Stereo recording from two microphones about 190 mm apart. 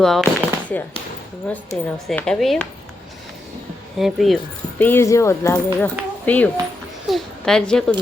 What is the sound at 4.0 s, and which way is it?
A woman's voice, centre (ahead or behind).